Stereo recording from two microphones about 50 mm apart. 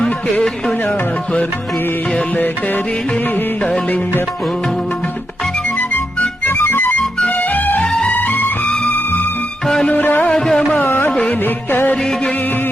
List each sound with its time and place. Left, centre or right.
0.0 s music: centre
0.9 s music: left
2.3 s music: left
5.9 s music: left
10.3 s carnatic music: centre
10.8 s music: left
11.1 s music: left
11.4 s music: left